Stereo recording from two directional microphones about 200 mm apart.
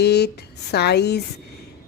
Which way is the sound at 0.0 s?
55° left (ahead or behind).